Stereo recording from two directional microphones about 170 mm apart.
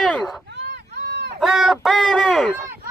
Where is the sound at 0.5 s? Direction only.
90° right.